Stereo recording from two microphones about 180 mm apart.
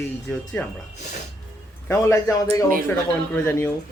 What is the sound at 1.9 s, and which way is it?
A man's voice, 15° left (ahead or behind).